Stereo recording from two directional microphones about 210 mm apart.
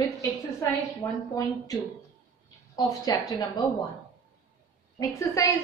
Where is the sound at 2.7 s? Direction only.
15° left (ahead or behind).